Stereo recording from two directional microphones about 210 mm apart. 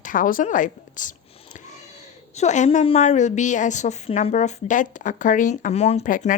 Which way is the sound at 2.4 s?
35° left (ahead or behind).